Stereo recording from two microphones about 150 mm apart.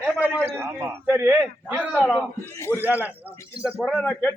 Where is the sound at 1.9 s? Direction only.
10° left (ahead or behind).